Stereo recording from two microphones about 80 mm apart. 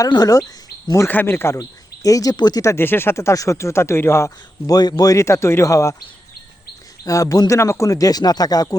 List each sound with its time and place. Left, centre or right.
0.1 s speech: left
0.9 s speech: left
2.0 s speech: left
2.3 s speech: left
2.6 s speech: left
2.8 s speech: left
4.6 s speech: left
7.0 s speech: left